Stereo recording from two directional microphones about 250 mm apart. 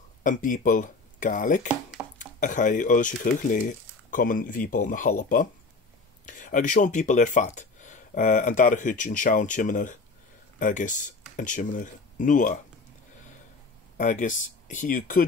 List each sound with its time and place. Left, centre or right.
0.2 s speech: left
1.7 s dishes: centre
2.1 s speech: left
13.9 s speech: left